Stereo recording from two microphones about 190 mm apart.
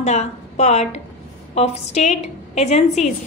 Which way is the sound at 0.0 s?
35° left (ahead or behind).